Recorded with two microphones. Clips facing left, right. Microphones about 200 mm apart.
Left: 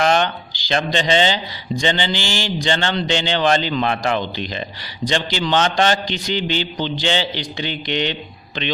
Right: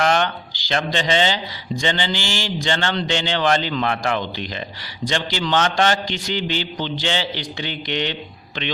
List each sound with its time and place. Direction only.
0.0 s speech: 20° left (ahead or behind)